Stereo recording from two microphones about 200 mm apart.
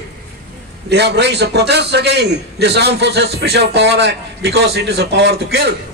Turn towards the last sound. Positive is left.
turn(degrees=-55)  # may be behind; listen again after turning